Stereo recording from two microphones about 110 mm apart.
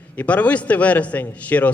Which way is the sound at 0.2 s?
15° left (ahead or behind).